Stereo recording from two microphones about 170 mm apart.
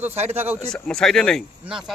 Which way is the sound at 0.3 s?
10° right (ahead or behind).